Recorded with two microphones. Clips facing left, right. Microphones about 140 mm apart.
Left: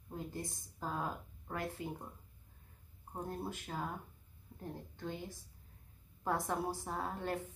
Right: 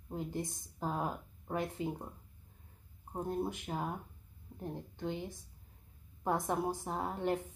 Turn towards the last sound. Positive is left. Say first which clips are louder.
# right 4 dB
turn(degrees=-20)  # may be behind; listen again after turning